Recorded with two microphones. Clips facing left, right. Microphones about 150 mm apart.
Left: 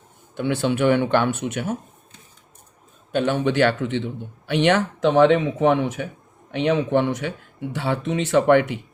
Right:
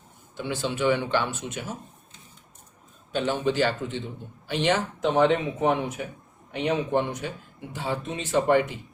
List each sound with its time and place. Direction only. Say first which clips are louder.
0.3 s speech: left 7 dB; 60° left (ahead or behind)
3.1 s speech: left 4 dB; 60° left (ahead or behind)